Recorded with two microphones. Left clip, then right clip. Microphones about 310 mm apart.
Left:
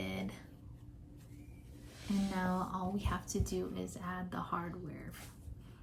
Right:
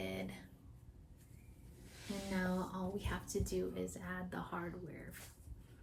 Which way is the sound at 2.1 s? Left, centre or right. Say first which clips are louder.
Left 4 dB; centre.